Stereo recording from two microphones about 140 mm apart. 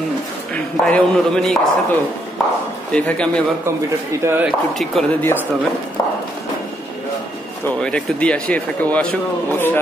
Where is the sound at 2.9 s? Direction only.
10° left (ahead or behind).